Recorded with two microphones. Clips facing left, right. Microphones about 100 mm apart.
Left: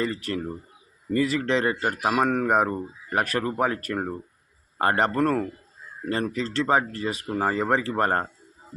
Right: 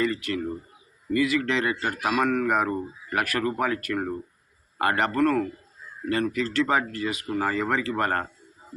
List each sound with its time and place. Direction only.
0.2 s speech: 35° left (ahead or behind)
1.8 s speech: 20° left (ahead or behind)